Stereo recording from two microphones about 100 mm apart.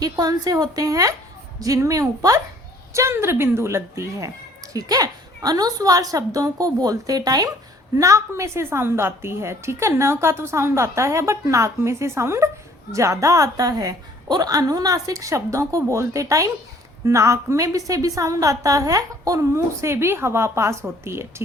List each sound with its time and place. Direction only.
0.0 s a woman's voice: 40° right (ahead or behind)